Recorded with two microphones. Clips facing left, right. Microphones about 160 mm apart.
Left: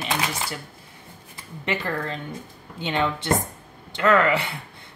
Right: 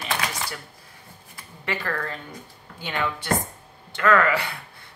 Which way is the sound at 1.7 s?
20° left (ahead or behind).